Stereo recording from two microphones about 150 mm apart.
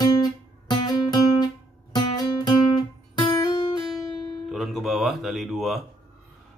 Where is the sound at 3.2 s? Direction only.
35° left (ahead or behind).